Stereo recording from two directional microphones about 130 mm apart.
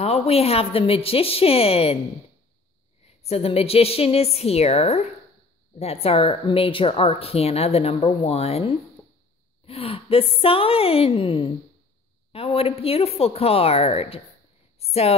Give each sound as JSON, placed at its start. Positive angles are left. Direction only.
{"t": 0.0, "sound": "a woman's voice", "side_deg": 50}
{"t": 3.3, "sound": "a woman's voice", "side_deg": 50}